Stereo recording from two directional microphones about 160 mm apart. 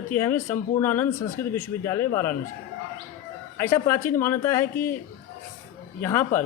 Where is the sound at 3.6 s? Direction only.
15° left (ahead or behind).